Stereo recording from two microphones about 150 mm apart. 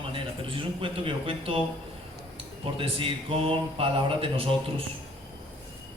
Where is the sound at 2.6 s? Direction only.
40° right (ahead or behind).